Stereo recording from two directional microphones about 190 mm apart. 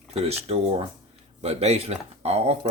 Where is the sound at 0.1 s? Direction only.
35° right (ahead or behind).